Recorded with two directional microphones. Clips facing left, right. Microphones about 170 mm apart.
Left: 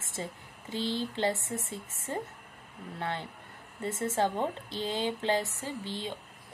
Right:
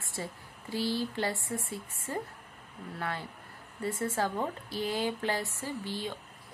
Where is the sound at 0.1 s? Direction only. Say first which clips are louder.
Left 1 dB; 20° left (ahead or behind).